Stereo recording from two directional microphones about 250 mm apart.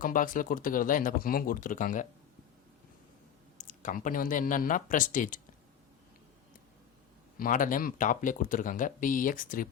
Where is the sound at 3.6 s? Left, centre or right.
Left.